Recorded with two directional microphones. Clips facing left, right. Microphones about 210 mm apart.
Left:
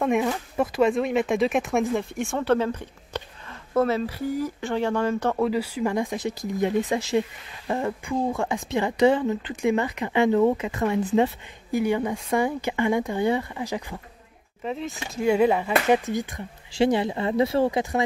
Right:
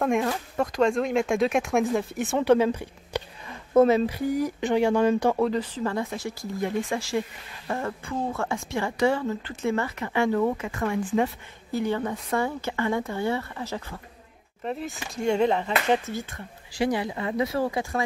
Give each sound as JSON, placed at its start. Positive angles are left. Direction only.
{"t": 0.0, "sound": "speech", "side_deg": 0}
{"t": 2.3, "sound": "speech", "side_deg": -15}
{"t": 5.4, "sound": "speech", "side_deg": 10}
{"t": 14.6, "sound": "speech", "side_deg": 0}